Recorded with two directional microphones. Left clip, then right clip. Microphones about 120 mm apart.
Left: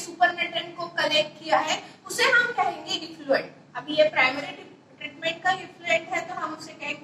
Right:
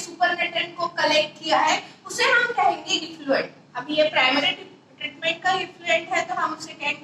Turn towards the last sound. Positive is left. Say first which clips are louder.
# right 6 dB
turn(degrees=-25)  # may be behind; listen again after turning